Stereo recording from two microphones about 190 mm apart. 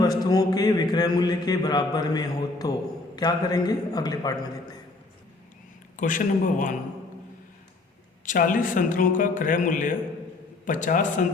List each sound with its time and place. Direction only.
0.0 s speech: 20° left (ahead or behind)
6.0 s a man's voice: 45° left (ahead or behind)
8.2 s a man's voice: 45° left (ahead or behind)